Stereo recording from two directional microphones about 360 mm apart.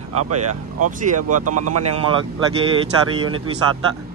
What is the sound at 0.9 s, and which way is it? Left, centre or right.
Speech, right.